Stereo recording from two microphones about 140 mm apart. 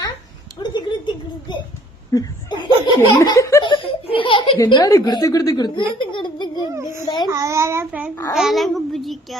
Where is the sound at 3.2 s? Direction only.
20° left (ahead or behind).